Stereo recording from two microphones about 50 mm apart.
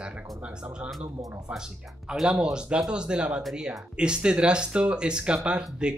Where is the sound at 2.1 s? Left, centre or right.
Centre.